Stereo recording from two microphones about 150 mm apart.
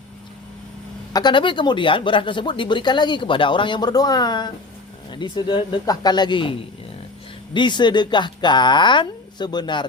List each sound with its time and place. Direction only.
1.1 s speech: 30° left (ahead or behind)